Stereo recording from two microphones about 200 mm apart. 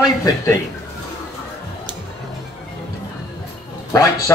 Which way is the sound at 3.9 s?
15° left (ahead or behind).